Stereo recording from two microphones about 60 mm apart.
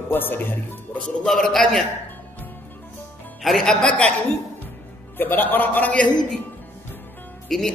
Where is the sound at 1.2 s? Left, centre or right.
Centre.